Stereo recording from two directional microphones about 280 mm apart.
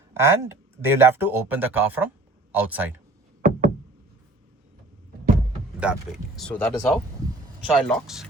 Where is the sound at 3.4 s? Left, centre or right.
Right.